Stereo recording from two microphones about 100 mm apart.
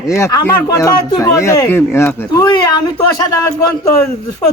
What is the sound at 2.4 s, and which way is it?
Speech, 45° left (ahead or behind).